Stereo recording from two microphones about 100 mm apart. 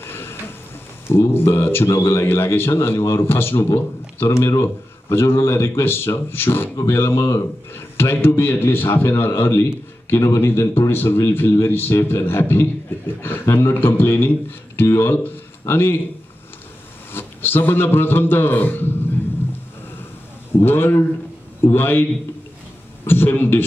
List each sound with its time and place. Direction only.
0.0 s train: 20° left (ahead or behind)
1.0 s a man's voice: 25° left (ahead or behind)
17.1 s a man's voice: 20° left (ahead or behind)
20.5 s a man's voice: 20° left (ahead or behind)
23.0 s a man's voice: 20° left (ahead or behind)